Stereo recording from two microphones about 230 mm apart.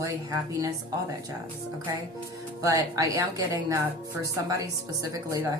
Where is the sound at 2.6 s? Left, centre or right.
Centre.